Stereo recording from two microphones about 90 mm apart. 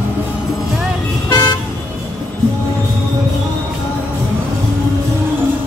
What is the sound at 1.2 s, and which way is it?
Toot, 55° left (ahead or behind).